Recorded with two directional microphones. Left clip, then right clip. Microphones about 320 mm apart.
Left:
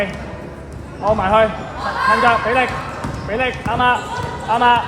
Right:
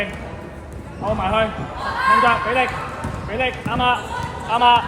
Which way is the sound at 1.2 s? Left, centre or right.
Left.